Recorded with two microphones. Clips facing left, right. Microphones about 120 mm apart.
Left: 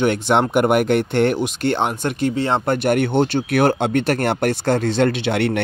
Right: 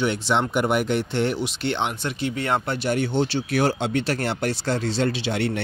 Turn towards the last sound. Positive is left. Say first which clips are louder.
# left 5 dB
turn(degrees=60)  # may be behind; listen again after turning